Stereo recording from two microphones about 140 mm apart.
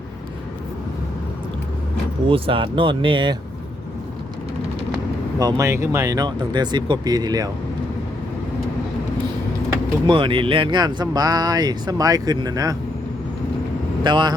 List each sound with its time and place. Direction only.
2.2 s speech: 40° right (ahead or behind)
5.4 s speech: 25° right (ahead or behind)
10.1 s speech: 40° right (ahead or behind)
14.0 s speech: 35° right (ahead or behind)